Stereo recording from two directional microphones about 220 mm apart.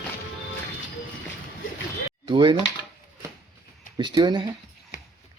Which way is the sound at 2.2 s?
20° right (ahead or behind).